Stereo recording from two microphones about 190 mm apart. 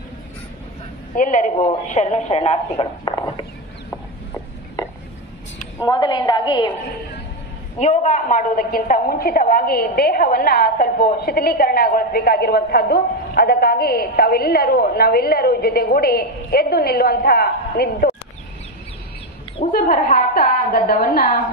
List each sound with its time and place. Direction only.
1.1 s a woman's voice: 45° left (ahead or behind); by 3.4 s 25° left (ahead or behind)
3.9 s a sound: 10° left (ahead or behind)
5.8 s a woman's voice: 20° left (ahead or behind)
7.8 s a woman's voice: 35° left (ahead or behind); by 18.1 s 55° left (ahead or behind)
19.6 s a woman's voice: 45° left (ahead or behind)